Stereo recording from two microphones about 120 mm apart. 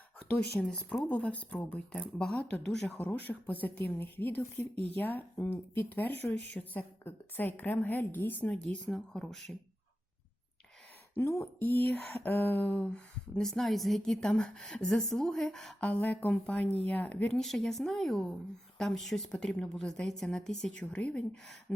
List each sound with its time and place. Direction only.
0.6 s speech: 10° left (ahead or behind)
11.1 s a woman's voice: 20° left (ahead or behind)